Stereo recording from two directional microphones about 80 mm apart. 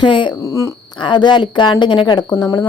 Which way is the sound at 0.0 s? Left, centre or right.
Left.